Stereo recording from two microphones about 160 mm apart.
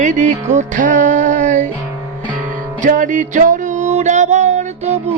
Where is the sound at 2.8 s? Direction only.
55° right (ahead or behind).